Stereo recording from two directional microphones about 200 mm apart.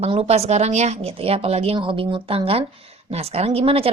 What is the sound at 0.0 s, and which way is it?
A woman's voice, 30° right (ahead or behind).